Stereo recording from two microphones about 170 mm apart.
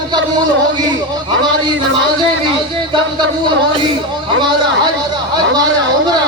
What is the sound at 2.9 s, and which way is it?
A man's voice, 30° right (ahead or behind).